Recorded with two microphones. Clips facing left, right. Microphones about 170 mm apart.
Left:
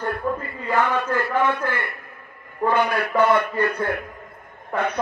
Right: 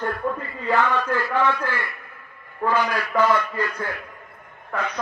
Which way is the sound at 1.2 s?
55° left (ahead or behind).